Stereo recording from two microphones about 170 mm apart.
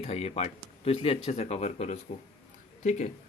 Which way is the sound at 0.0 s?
40° left (ahead or behind).